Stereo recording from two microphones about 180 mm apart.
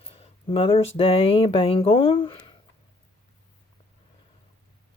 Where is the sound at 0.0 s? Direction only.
35° left (ahead or behind).